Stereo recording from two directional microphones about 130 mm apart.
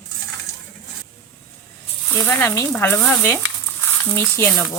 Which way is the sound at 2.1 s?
15° left (ahead or behind).